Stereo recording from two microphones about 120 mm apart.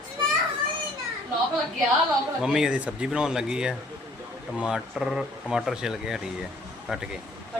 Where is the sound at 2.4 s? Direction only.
5° right (ahead or behind).